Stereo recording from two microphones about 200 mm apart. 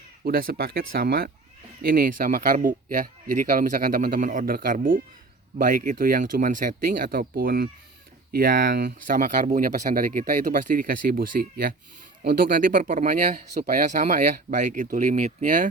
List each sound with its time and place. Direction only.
0.3 s speech: 50° right (ahead or behind)